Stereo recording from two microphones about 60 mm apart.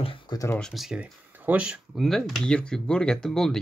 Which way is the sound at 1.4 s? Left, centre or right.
Right.